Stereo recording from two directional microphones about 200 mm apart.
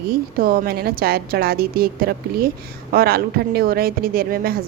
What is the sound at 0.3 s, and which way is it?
A woman's voice, 45° right (ahead or behind).